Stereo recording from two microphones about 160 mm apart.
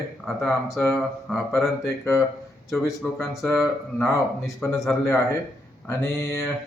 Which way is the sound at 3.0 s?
5° left (ahead or behind).